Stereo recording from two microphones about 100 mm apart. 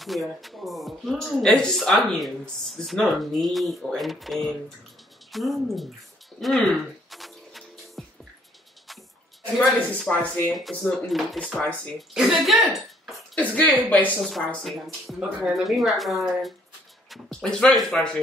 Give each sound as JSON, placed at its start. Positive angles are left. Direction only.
{"t": 0.0, "sound": "speech", "side_deg": 0}
{"t": 6.4, "sound": "music", "side_deg": 0}
{"t": 9.6, "sound": "speech", "side_deg": 5}
{"t": 13.3, "sound": "speech", "side_deg": 15}
{"t": 14.6, "sound": "speech", "side_deg": 0}